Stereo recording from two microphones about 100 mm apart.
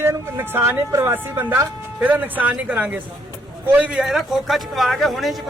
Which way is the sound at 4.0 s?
Centre (ahead or behind).